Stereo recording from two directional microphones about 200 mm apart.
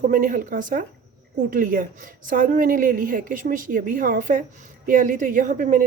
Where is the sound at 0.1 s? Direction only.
40° right (ahead or behind).